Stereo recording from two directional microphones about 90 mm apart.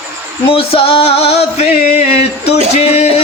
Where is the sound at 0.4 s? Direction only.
90° left.